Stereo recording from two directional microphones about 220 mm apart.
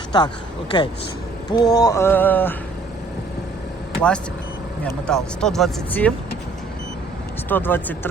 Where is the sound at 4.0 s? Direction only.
5° left (ahead or behind).